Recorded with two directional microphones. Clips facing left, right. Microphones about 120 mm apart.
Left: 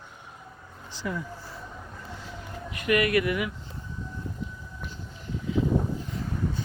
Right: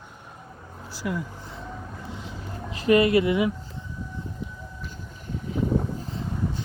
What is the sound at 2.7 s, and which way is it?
Speech, 30° right (ahead or behind).